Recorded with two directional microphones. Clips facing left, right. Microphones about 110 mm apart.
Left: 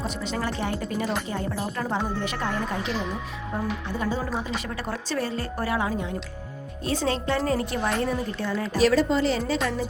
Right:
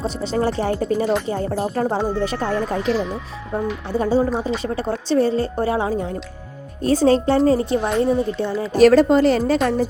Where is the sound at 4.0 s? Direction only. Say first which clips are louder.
Right 11 dB; 30° right (ahead or behind).